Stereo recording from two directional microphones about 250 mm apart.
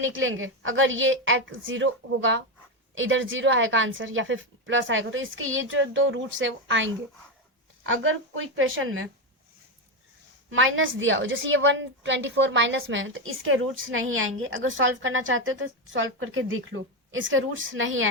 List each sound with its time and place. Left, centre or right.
0.0 s a woman's voice: right
10.5 s a woman's voice: right